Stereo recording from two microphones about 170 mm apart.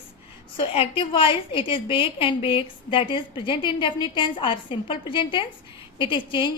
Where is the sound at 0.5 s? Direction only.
30° left (ahead or behind).